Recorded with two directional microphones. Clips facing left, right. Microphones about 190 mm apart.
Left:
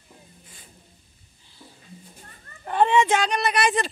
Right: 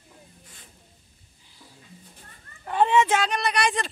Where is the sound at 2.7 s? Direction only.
5° right (ahead or behind).